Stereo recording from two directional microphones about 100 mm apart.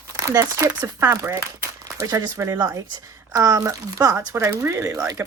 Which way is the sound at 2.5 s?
45° right (ahead or behind).